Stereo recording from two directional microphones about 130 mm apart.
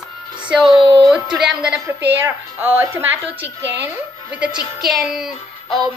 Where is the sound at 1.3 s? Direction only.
5° right (ahead or behind).